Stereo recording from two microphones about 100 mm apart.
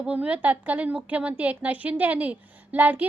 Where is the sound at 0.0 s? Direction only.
15° right (ahead or behind).